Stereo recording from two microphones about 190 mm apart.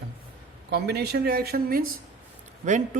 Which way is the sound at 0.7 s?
60° right (ahead or behind).